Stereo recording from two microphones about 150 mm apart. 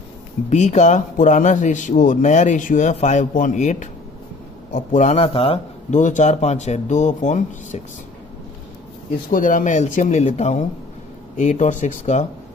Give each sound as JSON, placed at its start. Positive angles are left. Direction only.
{"t": 0.5, "sound": "a man's voice", "side_deg": 50}
{"t": 5.9, "sound": "speech", "side_deg": 55}
{"t": 9.3, "sound": "speech", "side_deg": 60}